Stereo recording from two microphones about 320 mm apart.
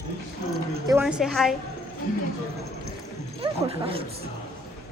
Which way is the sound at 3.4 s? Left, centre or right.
Centre.